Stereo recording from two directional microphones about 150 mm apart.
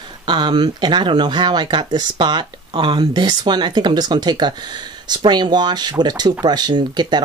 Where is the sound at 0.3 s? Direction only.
30° right (ahead or behind).